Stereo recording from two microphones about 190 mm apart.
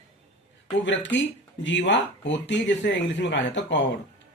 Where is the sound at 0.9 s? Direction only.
70° left (ahead or behind).